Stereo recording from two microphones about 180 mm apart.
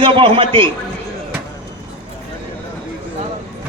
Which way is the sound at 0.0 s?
30° right (ahead or behind).